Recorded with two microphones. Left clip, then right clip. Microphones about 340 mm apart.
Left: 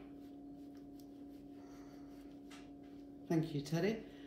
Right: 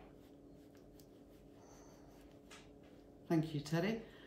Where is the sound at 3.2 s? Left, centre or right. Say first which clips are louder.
Even; right.